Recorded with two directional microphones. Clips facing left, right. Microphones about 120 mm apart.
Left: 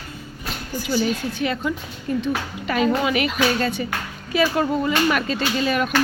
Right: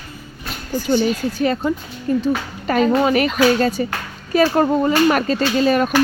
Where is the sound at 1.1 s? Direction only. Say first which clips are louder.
Right 5 dB; 40° right (ahead or behind).